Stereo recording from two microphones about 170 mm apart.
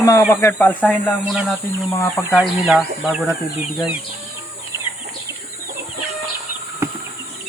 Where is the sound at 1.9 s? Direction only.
15° left (ahead or behind).